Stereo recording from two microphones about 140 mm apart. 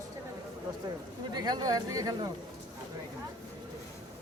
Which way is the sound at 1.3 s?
30° right (ahead or behind).